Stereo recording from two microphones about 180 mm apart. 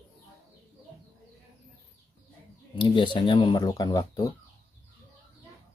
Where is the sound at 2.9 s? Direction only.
25° left (ahead or behind).